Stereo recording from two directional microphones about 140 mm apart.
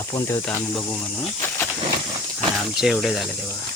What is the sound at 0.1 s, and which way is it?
Speech, 25° left (ahead or behind).